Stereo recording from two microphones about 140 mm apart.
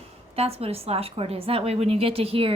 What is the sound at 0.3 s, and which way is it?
A woman's voice, 45° right (ahead or behind).